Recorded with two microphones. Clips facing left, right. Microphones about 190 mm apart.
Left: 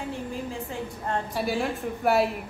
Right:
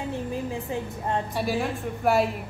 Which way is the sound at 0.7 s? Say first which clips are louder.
Right 2 dB; 15° right (ahead or behind).